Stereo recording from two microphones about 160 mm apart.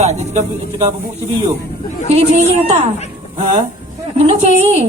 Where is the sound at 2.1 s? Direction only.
45° right (ahead or behind).